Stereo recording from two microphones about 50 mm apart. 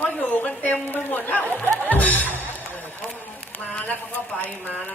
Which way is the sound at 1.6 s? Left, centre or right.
Left.